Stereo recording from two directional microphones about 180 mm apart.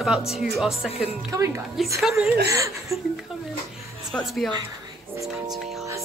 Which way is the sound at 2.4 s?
15° right (ahead or behind).